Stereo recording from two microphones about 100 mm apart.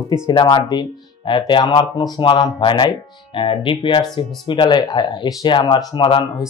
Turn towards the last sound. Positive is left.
turn(degrees=50)  # may be behind; listen again after turning